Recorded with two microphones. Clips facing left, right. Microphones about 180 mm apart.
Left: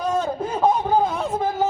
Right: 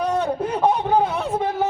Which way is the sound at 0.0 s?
65° right (ahead or behind).